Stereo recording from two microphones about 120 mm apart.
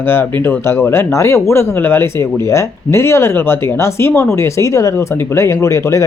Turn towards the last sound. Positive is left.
turn(degrees=25)  # may be behind; listen again after turning